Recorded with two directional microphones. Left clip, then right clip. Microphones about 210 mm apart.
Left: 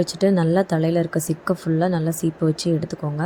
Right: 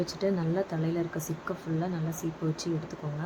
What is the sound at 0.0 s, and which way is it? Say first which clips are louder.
A woman's voice: left 10 dB; 35° left (ahead or behind).